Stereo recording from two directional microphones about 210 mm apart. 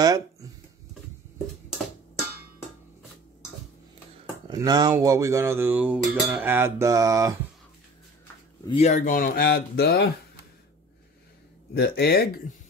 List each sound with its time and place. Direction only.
0.0 s speech: 15° right (ahead or behind)
4.5 s music: 20° right (ahead or behind)
8.6 s speech: 30° left (ahead or behind); by 10.0 s 50° left (ahead or behind)
11.7 s speech: 50° left (ahead or behind)